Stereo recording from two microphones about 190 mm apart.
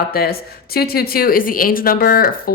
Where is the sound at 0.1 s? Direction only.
55° left (ahead or behind).